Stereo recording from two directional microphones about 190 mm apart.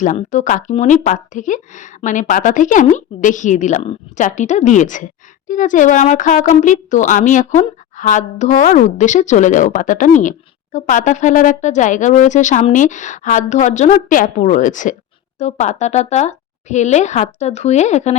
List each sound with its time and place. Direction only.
0.0 s a woman's voice: 40° left (ahead or behind)